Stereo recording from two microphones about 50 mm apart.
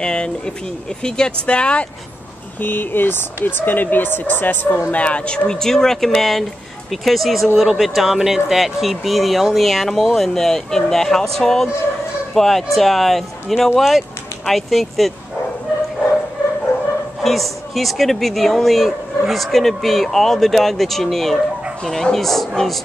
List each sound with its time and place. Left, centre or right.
0.0 s speech: centre
2.6 s speech: left
4.9 s speech: left; by 15.1 s centre
17.2 s speech: centre